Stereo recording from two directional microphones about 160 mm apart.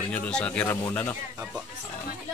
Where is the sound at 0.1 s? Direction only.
10° left (ahead or behind).